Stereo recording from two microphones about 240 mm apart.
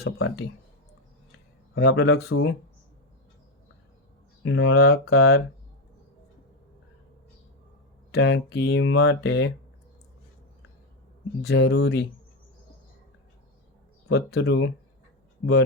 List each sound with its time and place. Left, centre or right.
0.2 s speech: left
1.7 s speech: left
4.4 s speech: left
8.1 s speech: left
11.4 s speech: left
14.1 s speech: left